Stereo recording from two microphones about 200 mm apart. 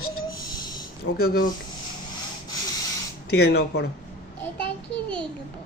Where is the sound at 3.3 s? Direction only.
55° left (ahead or behind).